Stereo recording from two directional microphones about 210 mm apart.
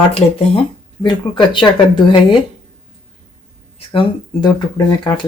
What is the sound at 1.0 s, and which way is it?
Speech, 20° left (ahead or behind).